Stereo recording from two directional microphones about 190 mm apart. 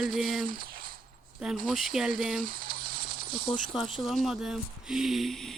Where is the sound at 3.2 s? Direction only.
25° right (ahead or behind).